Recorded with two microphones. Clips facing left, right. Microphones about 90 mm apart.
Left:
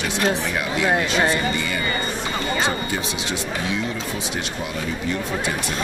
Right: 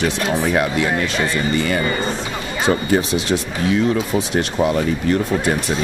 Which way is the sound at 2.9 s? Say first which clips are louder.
Right 9 dB; 45° right (ahead or behind).